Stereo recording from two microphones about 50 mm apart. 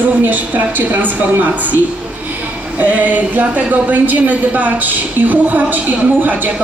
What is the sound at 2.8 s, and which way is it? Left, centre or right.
A woman's voice, right.